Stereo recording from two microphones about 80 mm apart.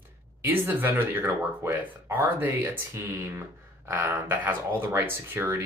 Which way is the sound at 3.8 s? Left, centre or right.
Right.